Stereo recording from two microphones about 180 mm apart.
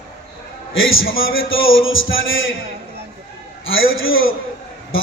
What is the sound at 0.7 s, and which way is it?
Speech, 90° left.